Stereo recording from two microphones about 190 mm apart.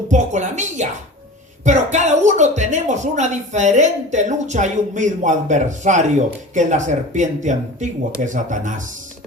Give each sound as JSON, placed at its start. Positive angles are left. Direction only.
{"t": 0.1, "sound": "speech", "side_deg": -40}